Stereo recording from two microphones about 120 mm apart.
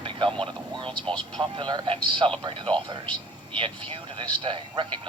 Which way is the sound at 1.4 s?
40° right (ahead or behind).